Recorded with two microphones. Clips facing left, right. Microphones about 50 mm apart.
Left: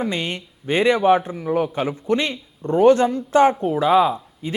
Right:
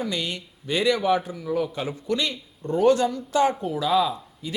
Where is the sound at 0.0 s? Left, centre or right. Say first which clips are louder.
Left 4 dB; left.